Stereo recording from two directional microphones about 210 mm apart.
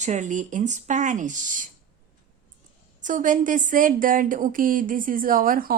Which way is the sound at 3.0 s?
40° right (ahead or behind).